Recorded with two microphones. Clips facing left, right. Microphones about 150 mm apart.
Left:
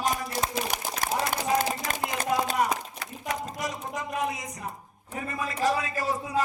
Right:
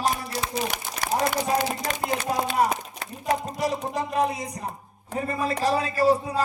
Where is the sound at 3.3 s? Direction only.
30° right (ahead or behind).